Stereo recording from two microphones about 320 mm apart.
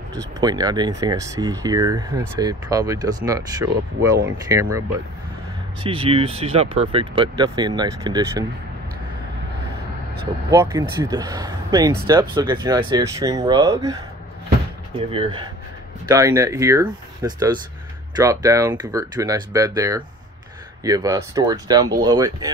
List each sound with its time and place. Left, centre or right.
0.4 s speech: centre
5.9 s speech: centre
10.5 s speech: centre
15.0 s speech: centre